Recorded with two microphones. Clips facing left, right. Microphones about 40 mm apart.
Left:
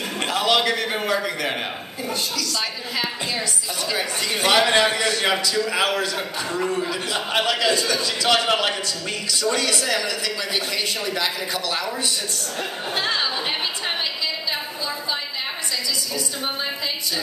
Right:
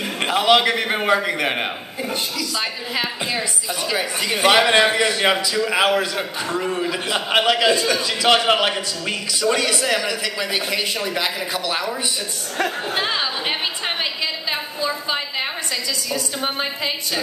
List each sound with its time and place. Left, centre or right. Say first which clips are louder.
0.2 s a man's voice: right 4 dB; centre
3.9 s a man's voice: right 2 dB; centre
12.9 s a sound: right 1 dB; centre
16.1 s a man's voice: right 3 dB; right